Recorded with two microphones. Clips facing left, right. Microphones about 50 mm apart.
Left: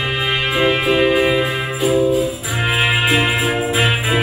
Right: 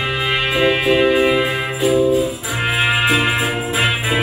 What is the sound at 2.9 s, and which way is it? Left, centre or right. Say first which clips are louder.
Music: right 1 dB; left.